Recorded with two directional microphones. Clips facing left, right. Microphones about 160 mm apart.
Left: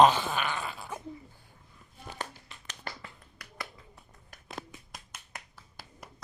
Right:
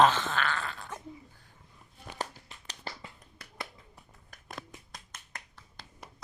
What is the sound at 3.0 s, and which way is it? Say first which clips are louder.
Finger snapping: even; 25° right (ahead or behind).